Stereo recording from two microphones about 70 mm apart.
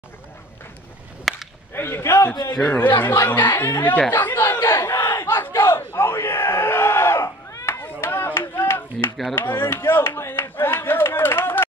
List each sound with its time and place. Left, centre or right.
1.3 s whip: centre
1.7 s speech: left
4.1 s battle cry: left
7.8 s a sound: left
9.3 s clapping: left